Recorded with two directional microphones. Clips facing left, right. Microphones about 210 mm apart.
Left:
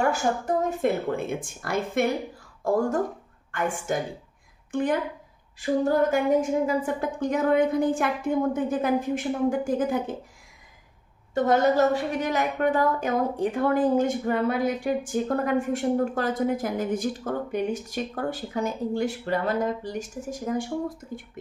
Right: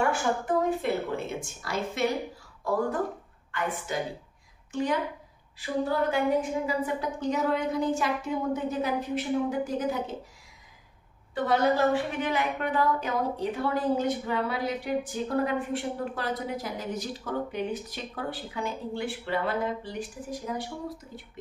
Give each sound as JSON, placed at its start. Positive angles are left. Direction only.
{"t": 0.0, "sound": "a woman's voice", "side_deg": 40}
{"t": 11.3, "sound": "a woman's voice", "side_deg": 45}